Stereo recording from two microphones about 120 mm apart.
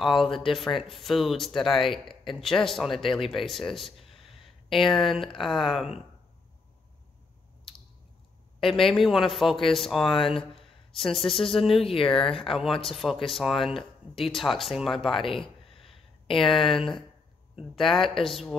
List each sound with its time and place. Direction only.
0.0 s speech: centre (ahead or behind)
8.5 s speech: centre (ahead or behind)
10.1 s speech: 50° left (ahead or behind)
10.5 s speech: centre (ahead or behind)
11.8 s speech: 50° left (ahead or behind)
12.1 s speech: 5° left (ahead or behind)
15.7 s a sound: 50° left (ahead or behind)
16.3 s speech: centre (ahead or behind)